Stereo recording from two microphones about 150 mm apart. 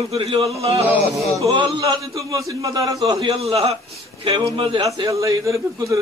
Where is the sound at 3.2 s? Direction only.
40° right (ahead or behind).